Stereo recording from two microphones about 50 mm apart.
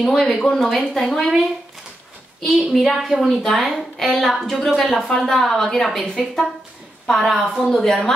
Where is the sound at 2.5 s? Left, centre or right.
Centre.